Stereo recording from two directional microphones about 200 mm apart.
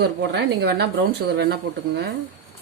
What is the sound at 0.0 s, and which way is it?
Speech, 55° right (ahead or behind).